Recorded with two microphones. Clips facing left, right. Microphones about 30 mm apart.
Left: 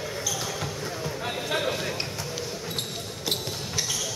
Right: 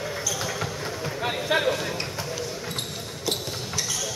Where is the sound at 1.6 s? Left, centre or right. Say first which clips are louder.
Right 3 dB; centre.